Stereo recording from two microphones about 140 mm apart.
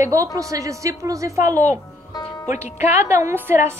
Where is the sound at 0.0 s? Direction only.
25° right (ahead or behind).